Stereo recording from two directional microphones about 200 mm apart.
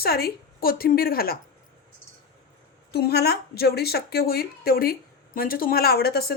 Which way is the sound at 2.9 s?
55° left (ahead or behind).